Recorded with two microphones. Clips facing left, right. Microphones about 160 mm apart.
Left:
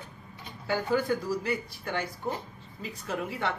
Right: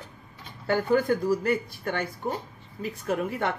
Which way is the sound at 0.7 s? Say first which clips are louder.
Right 4 dB; 50° right (ahead or behind).